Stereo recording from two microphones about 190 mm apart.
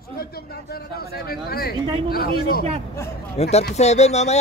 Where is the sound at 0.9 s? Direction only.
55° left (ahead or behind).